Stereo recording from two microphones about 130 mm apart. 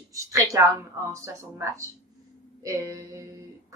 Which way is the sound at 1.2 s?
25° right (ahead or behind).